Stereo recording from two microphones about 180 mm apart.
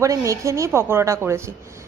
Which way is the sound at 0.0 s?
15° right (ahead or behind).